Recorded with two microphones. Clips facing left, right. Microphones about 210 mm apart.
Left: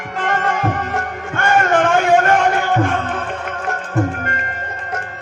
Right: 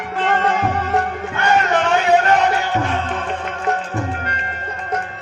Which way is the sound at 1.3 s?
50° left (ahead or behind).